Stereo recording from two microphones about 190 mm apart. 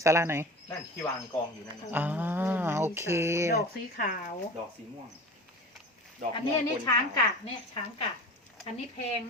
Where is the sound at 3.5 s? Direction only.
50° left (ahead or behind).